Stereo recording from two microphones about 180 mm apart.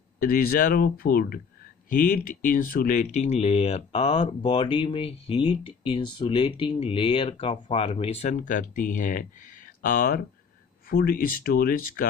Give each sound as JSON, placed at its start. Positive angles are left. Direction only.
{"t": 0.2, "sound": "speech", "side_deg": 50}